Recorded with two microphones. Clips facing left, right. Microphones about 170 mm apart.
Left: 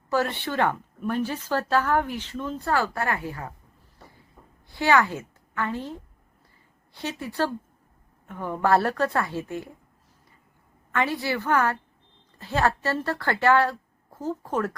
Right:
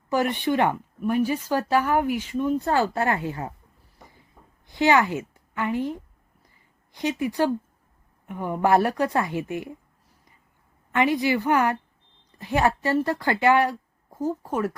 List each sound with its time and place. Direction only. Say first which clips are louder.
0.1 s a woman's voice: right 3 dB; 15° right (ahead or behind)
4.7 s a woman's voice: right 2 dB; 20° right (ahead or behind)
10.9 s a woman's voice: right 5 dB; 15° right (ahead or behind)